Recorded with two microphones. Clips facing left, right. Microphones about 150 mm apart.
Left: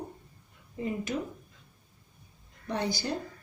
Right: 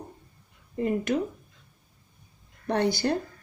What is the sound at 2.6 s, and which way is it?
Speech, 65° right (ahead or behind).